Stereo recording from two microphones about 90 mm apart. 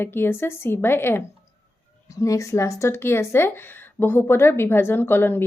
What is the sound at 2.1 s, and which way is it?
Speech, 35° left (ahead or behind).